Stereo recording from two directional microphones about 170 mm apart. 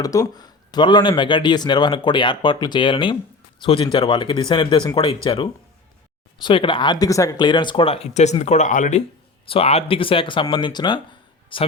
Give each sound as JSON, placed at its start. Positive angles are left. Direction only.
{"t": 0.0, "sound": "speech", "side_deg": 20}